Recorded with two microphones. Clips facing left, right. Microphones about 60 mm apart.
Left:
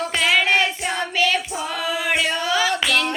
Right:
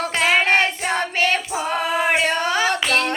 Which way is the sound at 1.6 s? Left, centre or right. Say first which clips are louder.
Right 7 dB; right.